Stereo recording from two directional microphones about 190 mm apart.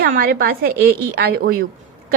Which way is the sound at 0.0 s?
50° right (ahead or behind).